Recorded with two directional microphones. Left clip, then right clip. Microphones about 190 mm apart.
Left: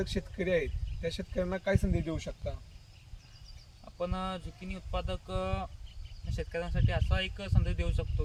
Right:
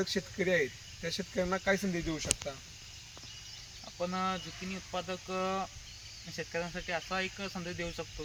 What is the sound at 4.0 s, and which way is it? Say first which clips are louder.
Speech: right 2 dB; 20° left (ahead or behind).